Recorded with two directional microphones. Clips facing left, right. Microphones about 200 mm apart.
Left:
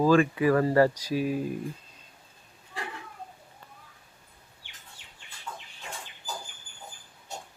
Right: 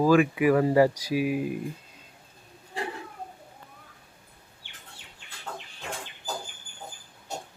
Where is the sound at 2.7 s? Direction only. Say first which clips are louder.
Right 5 dB; 35° right (ahead or behind).